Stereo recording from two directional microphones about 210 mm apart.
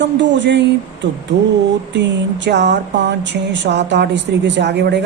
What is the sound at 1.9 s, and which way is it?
Speech, 55° right (ahead or behind).